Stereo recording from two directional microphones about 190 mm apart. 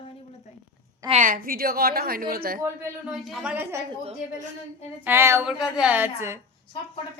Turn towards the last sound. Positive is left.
turn(degrees=-15)  # may be behind; listen again after turning